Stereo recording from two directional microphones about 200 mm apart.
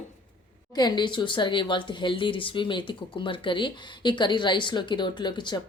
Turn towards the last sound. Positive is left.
turn(degrees=20)  # may be behind; listen again after turning